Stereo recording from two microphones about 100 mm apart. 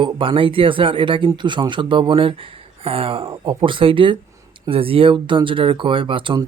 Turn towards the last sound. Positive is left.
turn(degrees=-55)  # may be behind; listen again after turning